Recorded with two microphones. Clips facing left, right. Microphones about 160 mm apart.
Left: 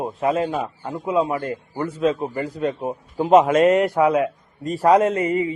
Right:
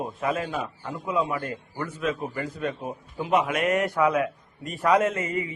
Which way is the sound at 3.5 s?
25° left (ahead or behind).